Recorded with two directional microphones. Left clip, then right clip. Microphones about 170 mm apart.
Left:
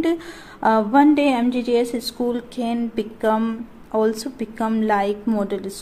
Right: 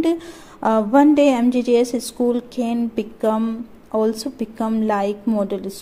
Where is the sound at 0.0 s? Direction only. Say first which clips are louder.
Right 2 dB; 20° right (ahead or behind).